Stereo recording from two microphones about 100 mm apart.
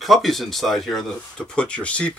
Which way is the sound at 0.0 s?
Centre (ahead or behind).